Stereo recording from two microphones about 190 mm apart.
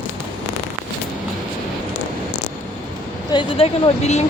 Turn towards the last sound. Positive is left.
turn(degrees=35)  # may be behind; listen again after turning